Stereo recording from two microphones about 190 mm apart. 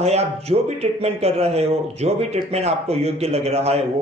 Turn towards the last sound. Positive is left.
turn(degrees=-35)  # may be behind; listen again after turning